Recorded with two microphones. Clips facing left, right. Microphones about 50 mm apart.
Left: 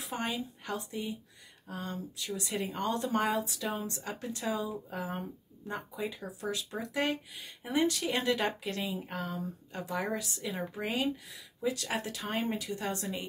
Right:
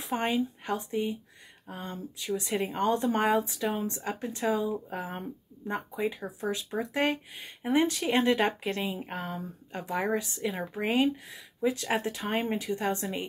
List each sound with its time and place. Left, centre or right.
0.0 s speech: right